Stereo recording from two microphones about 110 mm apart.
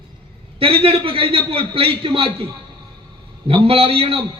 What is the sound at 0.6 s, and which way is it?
A man's voice, 55° right (ahead or behind).